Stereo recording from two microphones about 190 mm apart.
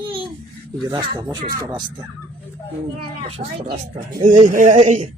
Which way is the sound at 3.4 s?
30° right (ahead or behind).